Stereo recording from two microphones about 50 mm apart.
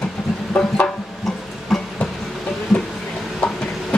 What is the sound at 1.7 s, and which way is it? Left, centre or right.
Train, centre.